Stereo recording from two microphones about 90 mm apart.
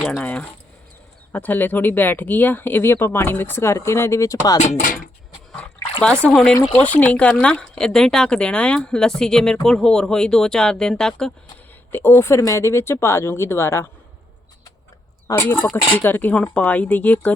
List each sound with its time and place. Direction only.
0.0 s speech: 10° left (ahead or behind); by 4.5 s 35° left (ahead or behind)
6.0 s speech: 10° left (ahead or behind)
11.9 s speech: 25° left (ahead or behind)
15.3 s speech: 35° left (ahead or behind)
15.7 s speech: 20° left (ahead or behind)